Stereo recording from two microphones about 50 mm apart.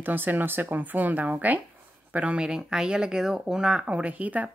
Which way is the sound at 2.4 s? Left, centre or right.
Centre.